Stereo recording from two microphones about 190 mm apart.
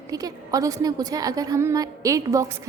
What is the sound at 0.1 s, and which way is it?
A woman's voice, 20° right (ahead or behind).